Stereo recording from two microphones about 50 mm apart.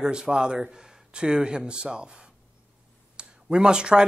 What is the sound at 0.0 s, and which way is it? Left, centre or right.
Speech, centre.